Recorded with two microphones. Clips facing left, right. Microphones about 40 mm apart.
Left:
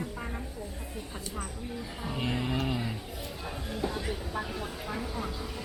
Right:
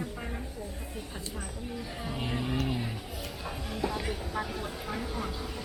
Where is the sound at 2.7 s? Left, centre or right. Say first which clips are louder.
Left 1 dB; left.